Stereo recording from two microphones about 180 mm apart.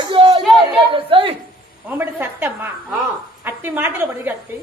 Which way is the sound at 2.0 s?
10° right (ahead or behind).